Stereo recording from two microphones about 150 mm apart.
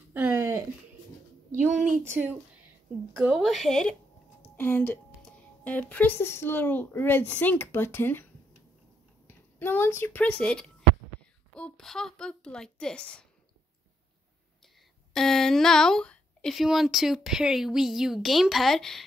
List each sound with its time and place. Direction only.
0.1 s a sound: 10° right (ahead or behind)
1.5 s speech: 55° right (ahead or behind)
3.2 s speech: 5° right (ahead or behind)
4.4 s a sound: 15° left (ahead or behind)
5.6 s speech: 10° left (ahead or behind)
9.3 s speech: 15° left (ahead or behind)
15.1 s speech: 5° left (ahead or behind)